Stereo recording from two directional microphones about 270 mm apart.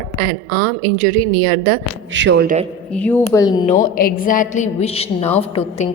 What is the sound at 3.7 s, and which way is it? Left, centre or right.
A woman's voice, left.